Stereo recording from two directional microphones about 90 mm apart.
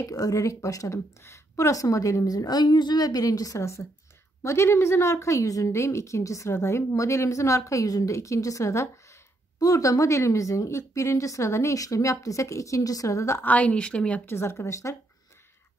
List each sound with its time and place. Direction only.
0.0 s a woman's voice: 40° left (ahead or behind)
13.5 s speech: 15° left (ahead or behind)
14.2 s speech: 25° left (ahead or behind)